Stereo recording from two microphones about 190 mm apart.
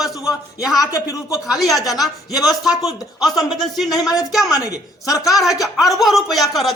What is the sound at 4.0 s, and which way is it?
Speech, 20° left (ahead or behind).